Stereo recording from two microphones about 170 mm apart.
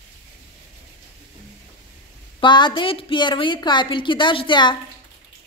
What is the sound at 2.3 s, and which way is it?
A woman's voice, 25° left (ahead or behind).